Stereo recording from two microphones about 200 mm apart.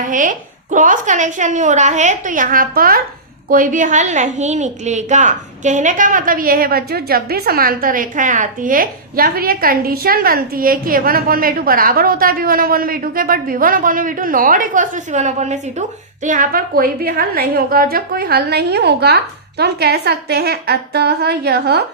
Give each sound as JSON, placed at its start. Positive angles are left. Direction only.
{"t": 0.0, "sound": "a woman's voice", "side_deg": -40}